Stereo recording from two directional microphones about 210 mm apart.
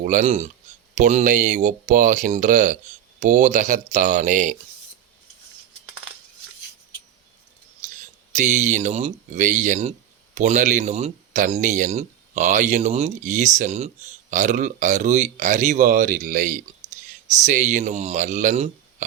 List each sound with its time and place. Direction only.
0.0 s speech: 40° right (ahead or behind)
8.3 s speech: 35° right (ahead or behind)